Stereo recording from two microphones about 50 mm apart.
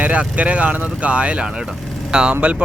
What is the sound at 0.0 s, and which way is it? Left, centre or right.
Speech, right.